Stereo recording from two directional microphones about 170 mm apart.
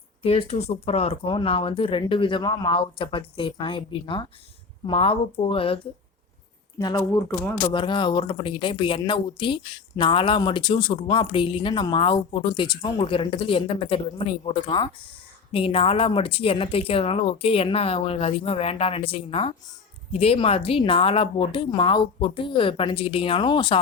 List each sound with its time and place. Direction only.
0.2 s speech: 35° left (ahead or behind)
6.7 s speech: 20° left (ahead or behind)
7.6 s speech: 30° left (ahead or behind)